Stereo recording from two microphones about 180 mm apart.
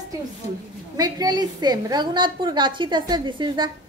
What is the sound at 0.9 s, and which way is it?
A woman's voice, 20° right (ahead or behind).